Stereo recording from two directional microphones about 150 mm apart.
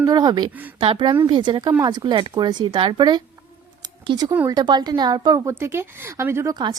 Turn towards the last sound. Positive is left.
turn(degrees=-30)  # may be behind; listen again after turning